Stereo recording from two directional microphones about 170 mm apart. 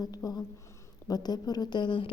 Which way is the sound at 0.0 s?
20° left (ahead or behind).